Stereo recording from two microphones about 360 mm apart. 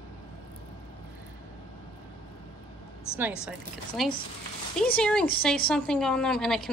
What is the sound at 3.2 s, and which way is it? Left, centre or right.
A woman's voice, centre.